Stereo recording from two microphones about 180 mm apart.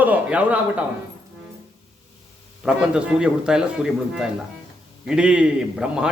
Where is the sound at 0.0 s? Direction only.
10° right (ahead or behind).